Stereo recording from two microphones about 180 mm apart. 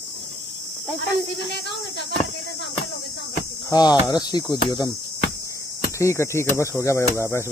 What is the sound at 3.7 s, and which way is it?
Cricket, 20° left (ahead or behind).